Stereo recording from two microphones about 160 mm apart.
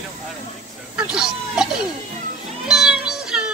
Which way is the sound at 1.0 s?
5° right (ahead or behind).